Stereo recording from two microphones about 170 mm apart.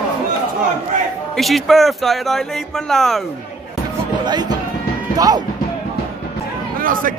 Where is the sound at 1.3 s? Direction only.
Centre (ahead or behind).